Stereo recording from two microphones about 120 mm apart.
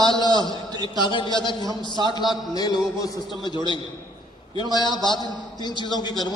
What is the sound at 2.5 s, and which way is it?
A man's voice, 35° left (ahead or behind).